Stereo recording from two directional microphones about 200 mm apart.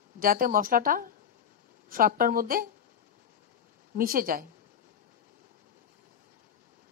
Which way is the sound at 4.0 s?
45° right (ahead or behind).